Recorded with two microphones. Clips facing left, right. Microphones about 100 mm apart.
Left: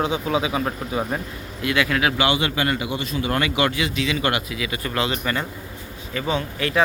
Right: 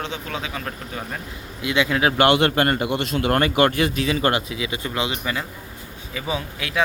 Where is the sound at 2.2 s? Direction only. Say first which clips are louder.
Right 4 dB; 55° right (ahead or behind).